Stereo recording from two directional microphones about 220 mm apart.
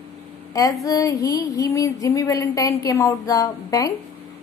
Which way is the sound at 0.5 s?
15° left (ahead or behind).